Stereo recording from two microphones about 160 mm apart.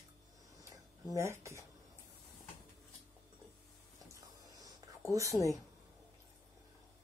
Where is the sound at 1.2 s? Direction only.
15° right (ahead or behind).